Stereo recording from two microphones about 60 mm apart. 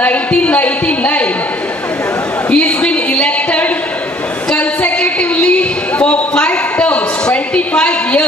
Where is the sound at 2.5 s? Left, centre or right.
Left.